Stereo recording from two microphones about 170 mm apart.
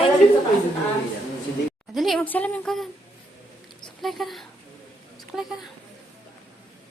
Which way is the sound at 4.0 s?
Centre (ahead or behind).